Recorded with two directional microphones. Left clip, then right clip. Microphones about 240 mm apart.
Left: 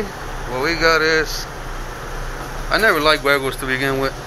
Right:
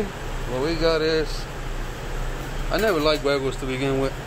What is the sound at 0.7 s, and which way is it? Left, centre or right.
Speech, centre.